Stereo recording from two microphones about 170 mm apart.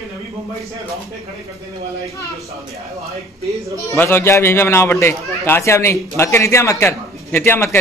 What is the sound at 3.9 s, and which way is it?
Speech, 15° left (ahead or behind).